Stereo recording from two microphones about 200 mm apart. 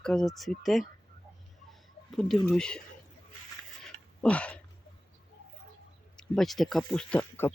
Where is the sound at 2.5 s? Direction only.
5° left (ahead or behind).